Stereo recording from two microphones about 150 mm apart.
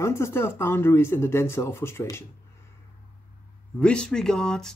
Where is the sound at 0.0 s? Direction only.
15° left (ahead or behind).